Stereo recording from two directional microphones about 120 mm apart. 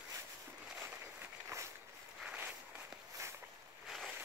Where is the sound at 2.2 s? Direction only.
15° right (ahead or behind).